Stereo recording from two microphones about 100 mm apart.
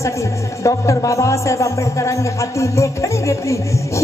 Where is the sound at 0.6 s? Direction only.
30° left (ahead or behind).